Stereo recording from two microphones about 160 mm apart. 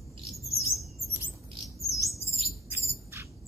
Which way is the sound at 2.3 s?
40° right (ahead or behind).